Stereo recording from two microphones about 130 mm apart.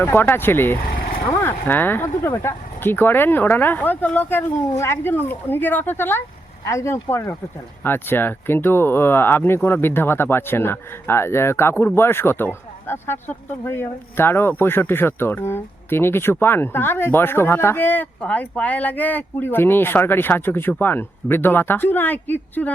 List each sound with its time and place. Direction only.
0.0 s speech: 15° left (ahead or behind)